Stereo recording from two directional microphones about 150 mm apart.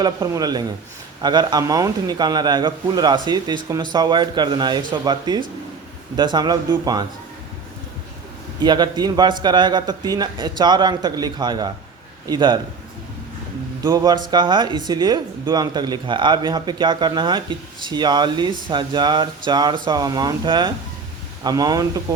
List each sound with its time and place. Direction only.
0.0 s speech: 25° right (ahead or behind)
8.5 s speech: 30° right (ahead or behind)
13.8 s speech: 25° right (ahead or behind)